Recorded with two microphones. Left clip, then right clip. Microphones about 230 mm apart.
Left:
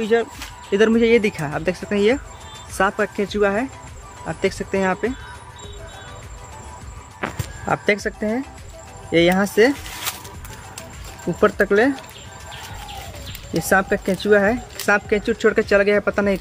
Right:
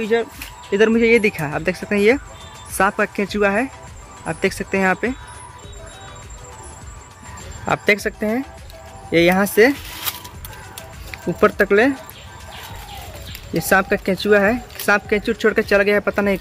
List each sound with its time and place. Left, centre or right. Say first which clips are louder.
0.0 s speech: even; centre; by 5.1 s right
7.6 s speech: right 2 dB; centre
11.3 s speech: right 2 dB; centre
13.5 s speech: right 1 dB; centre